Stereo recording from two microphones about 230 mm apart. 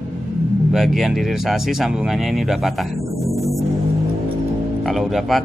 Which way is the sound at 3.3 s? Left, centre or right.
Centre.